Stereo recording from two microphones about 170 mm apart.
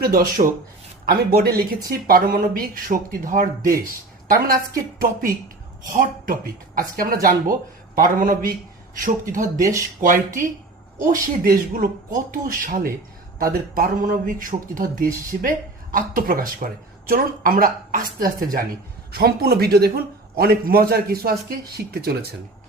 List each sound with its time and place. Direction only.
0.0 s speech: 60° right (ahead or behind)
9.6 s speech: 20° right (ahead or behind)
10.0 s speech: 55° right (ahead or behind)
19.1 s speech: 65° right (ahead or behind)